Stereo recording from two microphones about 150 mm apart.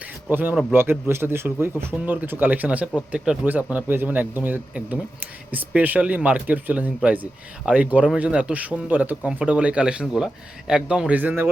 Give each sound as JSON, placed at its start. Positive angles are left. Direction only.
{"t": 0.3, "sound": "speech", "side_deg": -10}